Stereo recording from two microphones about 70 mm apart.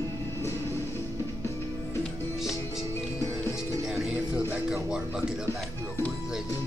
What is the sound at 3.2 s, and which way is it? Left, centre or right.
Music, left.